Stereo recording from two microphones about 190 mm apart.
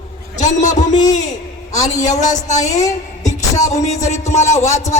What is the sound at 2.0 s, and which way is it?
A man's voice, 40° left (ahead or behind).